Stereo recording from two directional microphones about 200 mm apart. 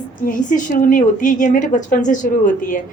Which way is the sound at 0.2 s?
40° left (ahead or behind).